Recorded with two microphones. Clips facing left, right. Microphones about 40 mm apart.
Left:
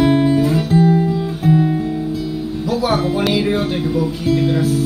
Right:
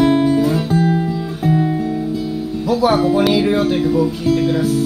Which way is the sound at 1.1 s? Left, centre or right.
Centre.